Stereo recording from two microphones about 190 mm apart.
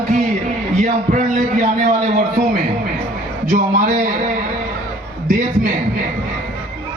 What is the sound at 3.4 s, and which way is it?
Speech, 45° right (ahead or behind).